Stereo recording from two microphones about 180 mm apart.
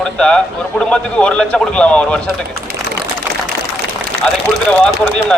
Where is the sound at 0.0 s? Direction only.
5° left (ahead or behind).